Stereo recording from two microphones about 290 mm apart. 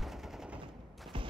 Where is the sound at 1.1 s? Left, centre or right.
Centre.